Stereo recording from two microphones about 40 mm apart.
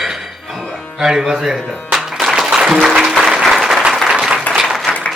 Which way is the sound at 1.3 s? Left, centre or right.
Centre.